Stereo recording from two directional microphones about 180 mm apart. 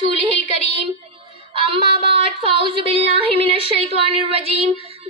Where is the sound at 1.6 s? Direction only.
30° right (ahead or behind).